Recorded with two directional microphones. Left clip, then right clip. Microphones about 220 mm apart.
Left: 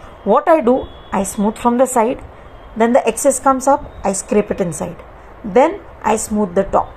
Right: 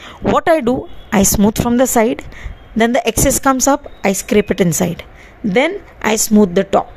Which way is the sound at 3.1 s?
70° right (ahead or behind).